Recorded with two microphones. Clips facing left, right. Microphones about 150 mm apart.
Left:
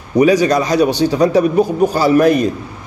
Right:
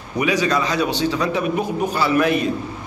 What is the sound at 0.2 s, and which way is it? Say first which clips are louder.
A man's voice: left 8 dB; 40° left (ahead or behind).